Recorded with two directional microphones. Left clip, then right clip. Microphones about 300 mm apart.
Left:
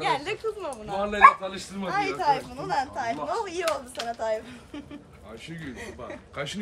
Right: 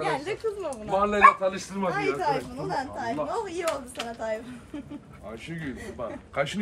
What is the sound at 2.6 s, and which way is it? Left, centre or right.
Speech, centre.